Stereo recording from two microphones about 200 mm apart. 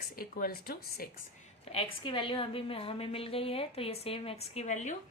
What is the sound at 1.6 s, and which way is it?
A woman's voice, 30° left (ahead or behind).